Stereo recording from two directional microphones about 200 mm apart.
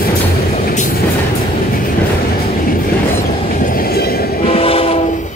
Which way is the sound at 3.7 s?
50° left (ahead or behind).